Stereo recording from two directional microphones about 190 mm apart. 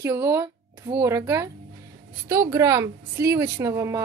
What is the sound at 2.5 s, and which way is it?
Speech, 15° right (ahead or behind).